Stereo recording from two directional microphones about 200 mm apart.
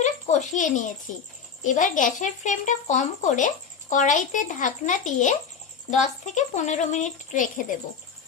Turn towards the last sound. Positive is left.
turn(degrees=40)  # may be behind; listen again after turning